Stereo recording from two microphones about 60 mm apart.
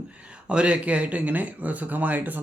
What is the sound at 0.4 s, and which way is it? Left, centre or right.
Speech, centre.